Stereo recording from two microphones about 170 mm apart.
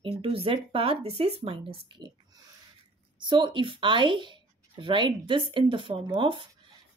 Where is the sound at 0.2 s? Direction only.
35° right (ahead or behind).